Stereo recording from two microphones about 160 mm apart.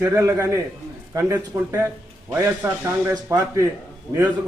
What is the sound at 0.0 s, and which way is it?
A man's voice, 15° right (ahead or behind).